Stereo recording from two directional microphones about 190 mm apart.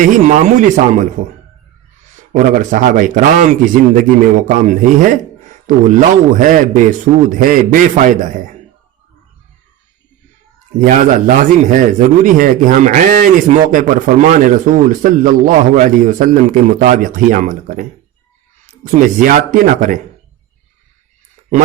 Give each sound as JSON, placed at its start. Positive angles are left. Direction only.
{"t": 0.0, "sound": "speech", "side_deg": -40}
{"t": 2.3, "sound": "speech", "side_deg": -45}
{"t": 11.3, "sound": "speech", "side_deg": -40}